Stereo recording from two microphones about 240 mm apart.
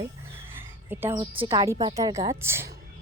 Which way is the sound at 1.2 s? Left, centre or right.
Right.